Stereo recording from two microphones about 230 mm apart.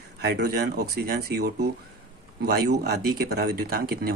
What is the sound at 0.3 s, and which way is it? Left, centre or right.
Speech, right.